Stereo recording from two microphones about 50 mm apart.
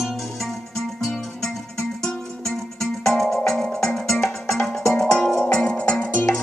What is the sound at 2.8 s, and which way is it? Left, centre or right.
Music, centre.